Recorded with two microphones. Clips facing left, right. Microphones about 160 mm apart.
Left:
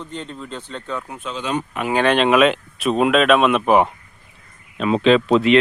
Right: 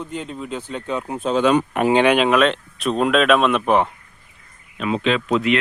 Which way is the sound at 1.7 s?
60° right (ahead or behind).